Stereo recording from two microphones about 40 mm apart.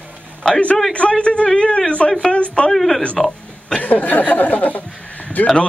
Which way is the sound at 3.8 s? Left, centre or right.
Left.